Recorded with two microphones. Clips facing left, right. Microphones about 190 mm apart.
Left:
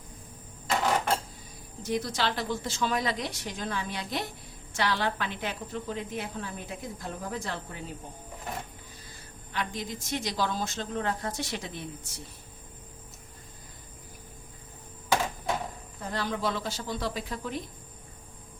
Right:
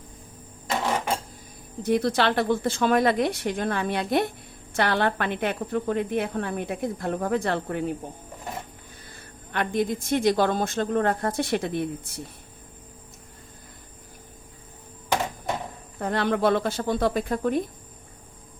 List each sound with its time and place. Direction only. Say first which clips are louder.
1.8 s a woman's voice: right 8 dB; 60° right (ahead or behind)
9.0 s a woman's voice: right 3 dB; 60° right (ahead or behind)
16.0 s a woman's voice: right 8 dB; 60° right (ahead or behind)